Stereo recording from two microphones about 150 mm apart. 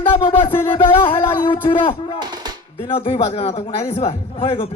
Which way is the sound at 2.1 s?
30° right (ahead or behind).